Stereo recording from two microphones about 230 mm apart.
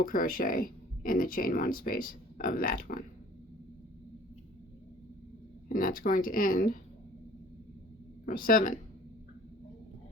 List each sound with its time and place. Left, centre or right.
0.0 s speech: left
5.6 s speech: left
8.2 s speech: left